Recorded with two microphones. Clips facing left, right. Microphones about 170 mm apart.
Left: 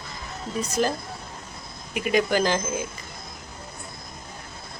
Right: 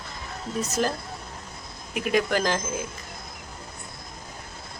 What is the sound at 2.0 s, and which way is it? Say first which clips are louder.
Speech: left 2 dB; centre (ahead or behind).